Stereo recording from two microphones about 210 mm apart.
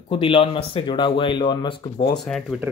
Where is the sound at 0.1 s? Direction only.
25° left (ahead or behind).